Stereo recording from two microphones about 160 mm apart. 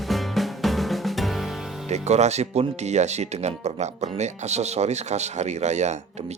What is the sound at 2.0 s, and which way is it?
Speech, 45° right (ahead or behind).